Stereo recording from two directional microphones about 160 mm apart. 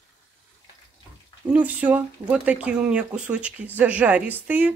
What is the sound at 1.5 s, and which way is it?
A woman's voice, 10° right (ahead or behind).